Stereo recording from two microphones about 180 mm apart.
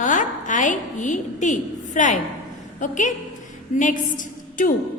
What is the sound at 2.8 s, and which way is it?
A woman's voice, 45° left (ahead or behind).